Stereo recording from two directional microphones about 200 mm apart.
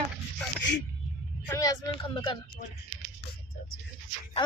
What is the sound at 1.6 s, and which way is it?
Speech, 20° left (ahead or behind).